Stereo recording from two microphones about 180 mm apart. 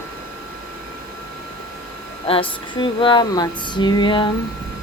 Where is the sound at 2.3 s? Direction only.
30° left (ahead or behind).